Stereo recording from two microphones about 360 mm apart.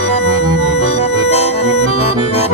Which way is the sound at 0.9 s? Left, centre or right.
Centre.